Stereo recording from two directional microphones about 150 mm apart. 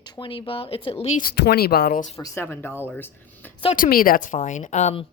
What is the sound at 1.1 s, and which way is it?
Speech, 85° left.